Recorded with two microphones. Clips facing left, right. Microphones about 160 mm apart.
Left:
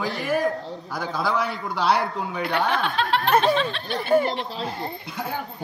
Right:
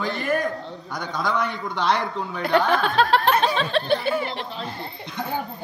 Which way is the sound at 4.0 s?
45° left (ahead or behind).